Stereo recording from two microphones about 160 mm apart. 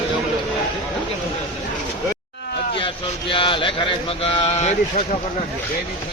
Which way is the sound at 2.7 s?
35° left (ahead or behind).